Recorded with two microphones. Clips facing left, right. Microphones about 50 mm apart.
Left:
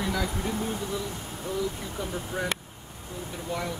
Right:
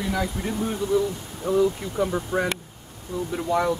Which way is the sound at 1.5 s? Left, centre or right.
Right.